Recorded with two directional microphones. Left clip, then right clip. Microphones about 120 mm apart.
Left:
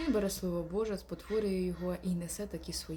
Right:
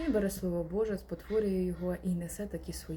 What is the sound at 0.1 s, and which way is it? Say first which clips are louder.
Speech: right 2 dB; 25° left (ahead or behind).